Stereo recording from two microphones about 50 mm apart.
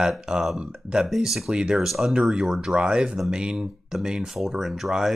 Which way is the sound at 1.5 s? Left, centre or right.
Centre.